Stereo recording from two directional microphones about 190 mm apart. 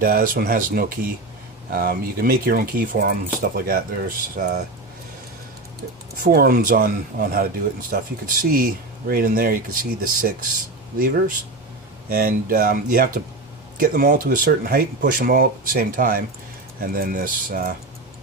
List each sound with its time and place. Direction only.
0.0 s speech: 50° right (ahead or behind)
6.2 s speech: 50° right (ahead or behind)
12.1 s speech: 50° right (ahead or behind)